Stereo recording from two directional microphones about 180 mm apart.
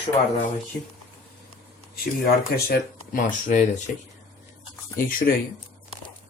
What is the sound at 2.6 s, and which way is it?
Speech, 55° left (ahead or behind).